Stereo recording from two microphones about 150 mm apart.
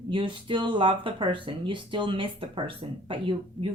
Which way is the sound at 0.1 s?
35° right (ahead or behind).